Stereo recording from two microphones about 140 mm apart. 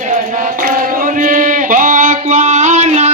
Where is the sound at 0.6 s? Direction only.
70° right (ahead or behind).